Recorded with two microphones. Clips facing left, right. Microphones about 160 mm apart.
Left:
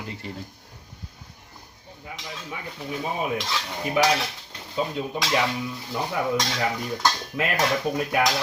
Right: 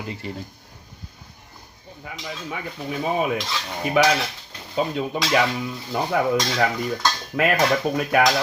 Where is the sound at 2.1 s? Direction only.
80° right.